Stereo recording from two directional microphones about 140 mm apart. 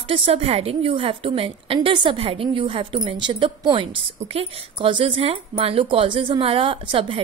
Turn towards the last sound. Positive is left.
turn(degrees=-40)  # may be behind; listen again after turning